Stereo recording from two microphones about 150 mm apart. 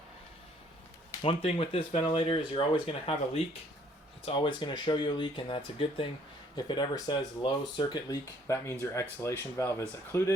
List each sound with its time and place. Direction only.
1.2 s speech: 40° left (ahead or behind); by 10.3 s 20° left (ahead or behind)